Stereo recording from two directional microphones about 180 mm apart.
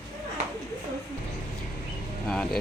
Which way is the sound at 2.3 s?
5° left (ahead or behind).